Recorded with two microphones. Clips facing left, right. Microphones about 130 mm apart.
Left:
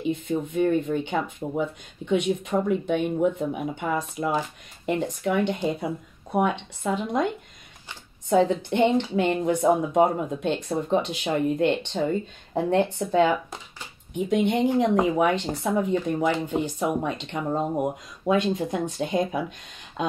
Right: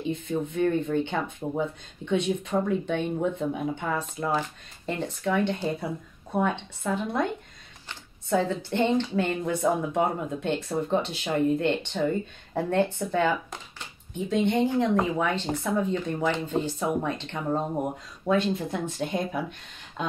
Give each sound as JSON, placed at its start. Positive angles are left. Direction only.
{"t": 0.0, "sound": "speech", "side_deg": 20}
{"t": 8.3, "sound": "speech", "side_deg": 20}